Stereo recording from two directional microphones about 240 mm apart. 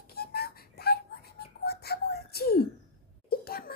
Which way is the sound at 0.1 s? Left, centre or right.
Left.